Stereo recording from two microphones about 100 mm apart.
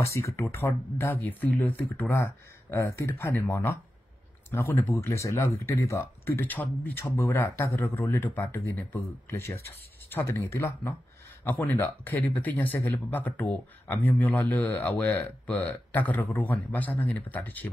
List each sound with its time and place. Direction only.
0.0 s speech: 30° left (ahead or behind)
2.1 s speech: 30° left (ahead or behind)